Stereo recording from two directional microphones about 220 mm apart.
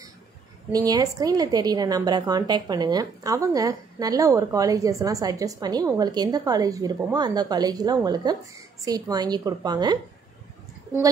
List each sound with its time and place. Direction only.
0.7 s a woman's voice: 15° right (ahead or behind)